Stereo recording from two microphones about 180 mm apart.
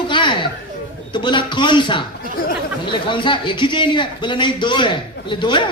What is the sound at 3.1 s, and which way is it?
A man's voice, 25° left (ahead or behind).